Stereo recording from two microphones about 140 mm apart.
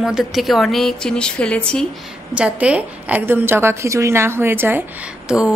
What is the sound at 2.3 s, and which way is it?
A woman's voice, 10° right (ahead or behind).